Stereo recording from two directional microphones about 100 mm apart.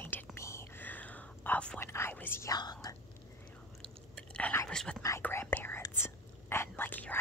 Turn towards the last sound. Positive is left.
turn(degrees=20)  # may be behind; listen again after turning